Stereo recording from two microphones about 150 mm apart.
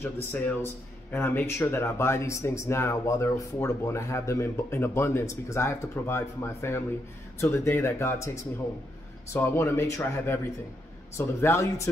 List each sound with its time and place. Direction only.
0.0 s speech: 15° left (ahead or behind)
9.3 s speech: 15° left (ahead or behind)